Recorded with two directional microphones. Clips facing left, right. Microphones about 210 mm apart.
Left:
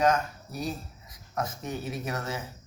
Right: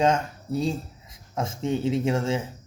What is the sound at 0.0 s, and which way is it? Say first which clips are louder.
Speech: right 2 dB; 25° right (ahead or behind).